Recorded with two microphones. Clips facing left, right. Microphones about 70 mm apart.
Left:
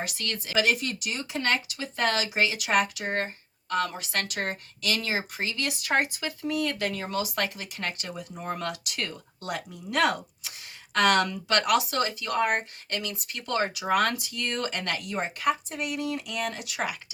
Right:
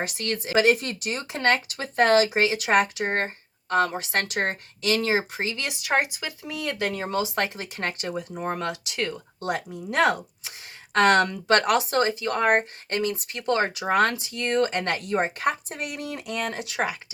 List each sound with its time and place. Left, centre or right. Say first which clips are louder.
0.0 s speech: right 5 dB; right
5.8 s speech: right 2 dB; centre